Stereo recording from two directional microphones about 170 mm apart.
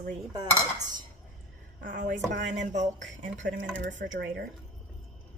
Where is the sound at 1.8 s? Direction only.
50° right (ahead or behind).